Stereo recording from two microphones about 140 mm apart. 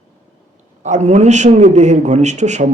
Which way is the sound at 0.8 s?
60° right (ahead or behind).